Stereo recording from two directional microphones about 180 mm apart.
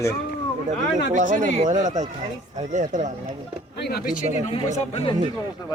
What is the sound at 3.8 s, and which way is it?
Speech, 60° left (ahead or behind).